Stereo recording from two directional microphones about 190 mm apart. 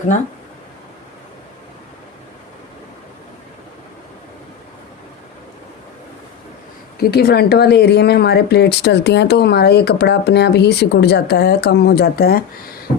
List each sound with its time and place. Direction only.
7.0 s speech: 55° left (ahead or behind)